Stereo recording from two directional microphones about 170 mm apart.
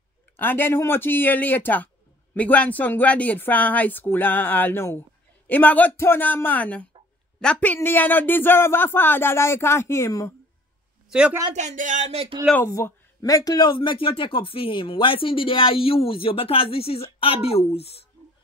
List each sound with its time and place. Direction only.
0.4 s a man's voice: 10° left (ahead or behind)
11.1 s a woman's voice: 5° right (ahead or behind)
11.5 s speech: 45° right (ahead or behind)
12.5 s speech: 15° left (ahead or behind); by 18.0 s 35° left (ahead or behind)